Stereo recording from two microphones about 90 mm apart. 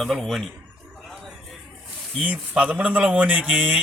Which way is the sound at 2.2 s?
15° right (ahead or behind).